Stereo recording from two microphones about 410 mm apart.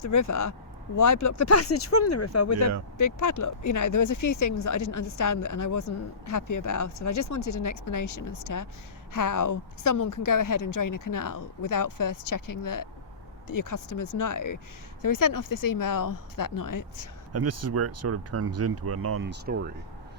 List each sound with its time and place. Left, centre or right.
0.0 s a woman's voice: left
17.3 s speech: right